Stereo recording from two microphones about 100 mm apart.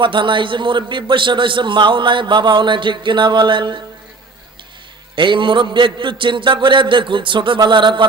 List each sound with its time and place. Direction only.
0.0 s a man's voice: 55° right (ahead or behind)
5.1 s a man's voice: 55° right (ahead or behind)